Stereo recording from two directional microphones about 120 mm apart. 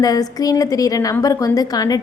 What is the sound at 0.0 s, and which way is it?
A woman's voice, 30° left (ahead or behind).